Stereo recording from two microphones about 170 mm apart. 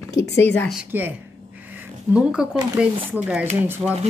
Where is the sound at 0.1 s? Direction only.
90° left.